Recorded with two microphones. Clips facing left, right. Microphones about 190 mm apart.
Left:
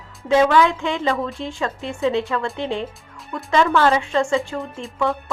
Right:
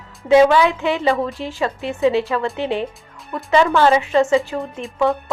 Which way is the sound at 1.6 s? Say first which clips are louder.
Right 5 dB; 15° right (ahead or behind).